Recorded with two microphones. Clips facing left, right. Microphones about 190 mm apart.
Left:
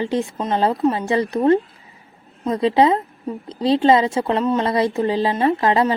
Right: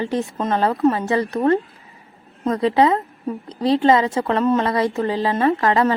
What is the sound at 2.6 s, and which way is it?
A woman's voice, 25° left (ahead or behind).